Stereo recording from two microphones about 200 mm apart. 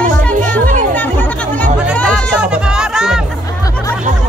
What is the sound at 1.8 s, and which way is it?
Music, 5° right (ahead or behind).